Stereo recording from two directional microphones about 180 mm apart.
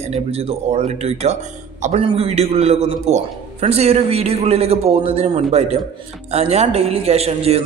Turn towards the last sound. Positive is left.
turn(degrees=-35)  # may be behind; listen again after turning